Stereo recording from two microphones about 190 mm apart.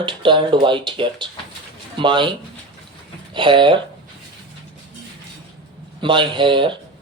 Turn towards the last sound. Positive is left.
turn(degrees=-25)  # may be behind; listen again after turning